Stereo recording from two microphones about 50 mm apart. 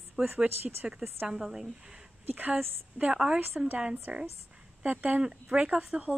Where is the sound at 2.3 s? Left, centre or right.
Right.